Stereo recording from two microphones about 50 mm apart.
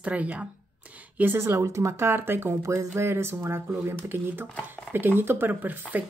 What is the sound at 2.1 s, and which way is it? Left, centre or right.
Speech, right.